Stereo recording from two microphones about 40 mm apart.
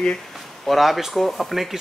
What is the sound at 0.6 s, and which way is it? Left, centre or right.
Speech, centre.